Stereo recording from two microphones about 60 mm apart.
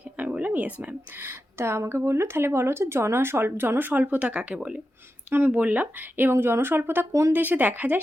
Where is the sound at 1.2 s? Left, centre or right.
Right; by 4.7 s centre.